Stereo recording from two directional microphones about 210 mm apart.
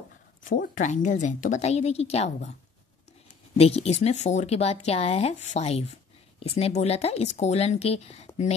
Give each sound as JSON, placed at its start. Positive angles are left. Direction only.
{"t": 0.4, "sound": "speech", "side_deg": 40}
{"t": 3.5, "sound": "speech", "side_deg": 30}